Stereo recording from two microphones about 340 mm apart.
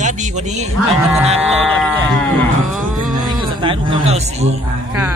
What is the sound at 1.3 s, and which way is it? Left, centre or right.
Speech, centre.